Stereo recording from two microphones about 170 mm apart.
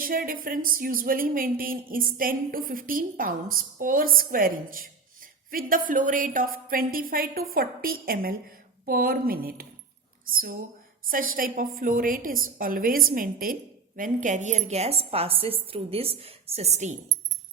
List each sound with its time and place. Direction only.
0.0 s a woman's voice: 55° right (ahead or behind); by 16.9 s 40° right (ahead or behind)